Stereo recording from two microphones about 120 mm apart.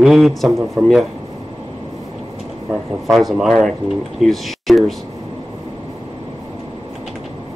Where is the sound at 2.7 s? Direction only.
Centre (ahead or behind).